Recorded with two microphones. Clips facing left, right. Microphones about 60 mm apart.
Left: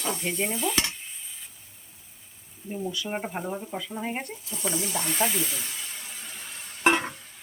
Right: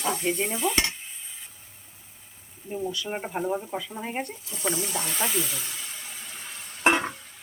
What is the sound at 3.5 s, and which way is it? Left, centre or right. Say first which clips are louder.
Speech: right 3 dB; centre.